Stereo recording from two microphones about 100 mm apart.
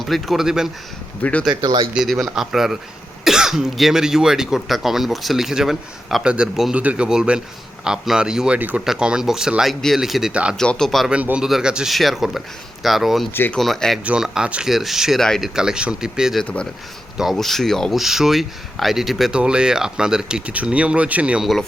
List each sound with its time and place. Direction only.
0.0 s speech: centre (ahead or behind)
1.2 s speech: 15° left (ahead or behind)
1.6 s speech: 45° right (ahead or behind)
1.9 s speech: 5° right (ahead or behind)
10.6 s speech: 5° left (ahead or behind)
11.1 s speech: 15° right (ahead or behind)
13.3 s speech: 20° left (ahead or behind)
13.6 s speech: 5° left (ahead or behind)
14.0 s speech: 10° right (ahead or behind)
16.4 s speech: 10° left (ahead or behind)
17.2 s speech: centre (ahead or behind)